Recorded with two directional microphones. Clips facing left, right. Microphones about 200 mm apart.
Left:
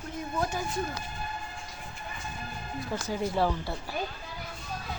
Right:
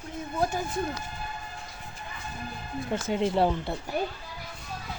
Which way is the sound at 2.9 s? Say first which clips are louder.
Right 5 dB; 25° right (ahead or behind).